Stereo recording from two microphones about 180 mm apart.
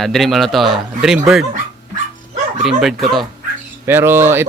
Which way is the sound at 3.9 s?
10° right (ahead or behind).